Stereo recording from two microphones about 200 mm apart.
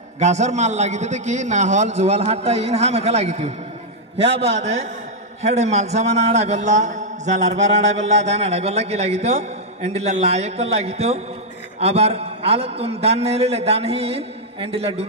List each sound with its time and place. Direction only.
0.2 s a man's voice: 35° right (ahead or behind)